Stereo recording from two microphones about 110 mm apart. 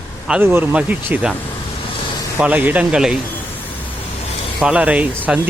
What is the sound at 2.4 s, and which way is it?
Speech, 15° right (ahead or behind).